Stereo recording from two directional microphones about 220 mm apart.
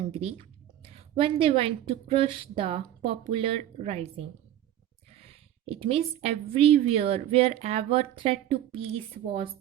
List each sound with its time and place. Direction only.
0.1 s a woman's voice: 25° right (ahead or behind)